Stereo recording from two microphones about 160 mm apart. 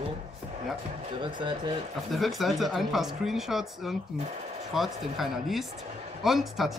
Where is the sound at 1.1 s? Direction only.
30° right (ahead or behind).